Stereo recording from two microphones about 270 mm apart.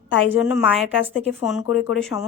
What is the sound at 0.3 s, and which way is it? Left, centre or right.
Speech, centre.